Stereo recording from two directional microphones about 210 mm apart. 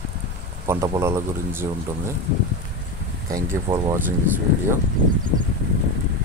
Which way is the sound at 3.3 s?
20° right (ahead or behind).